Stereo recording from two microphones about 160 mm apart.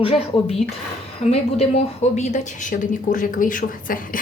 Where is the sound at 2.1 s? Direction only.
50° left (ahead or behind).